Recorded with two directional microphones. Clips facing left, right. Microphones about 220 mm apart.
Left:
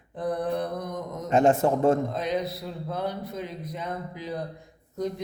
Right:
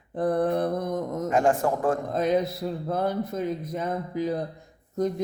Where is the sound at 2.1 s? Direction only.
50° right (ahead or behind).